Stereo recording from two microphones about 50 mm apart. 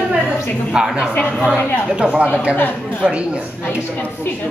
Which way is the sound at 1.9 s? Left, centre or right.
Right.